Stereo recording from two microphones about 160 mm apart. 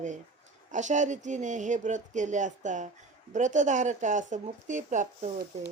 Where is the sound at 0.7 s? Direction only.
50° right (ahead or behind).